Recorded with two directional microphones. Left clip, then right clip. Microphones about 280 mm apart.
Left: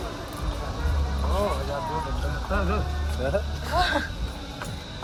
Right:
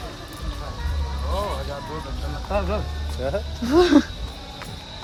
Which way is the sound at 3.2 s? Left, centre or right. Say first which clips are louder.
Right 1 dB; right.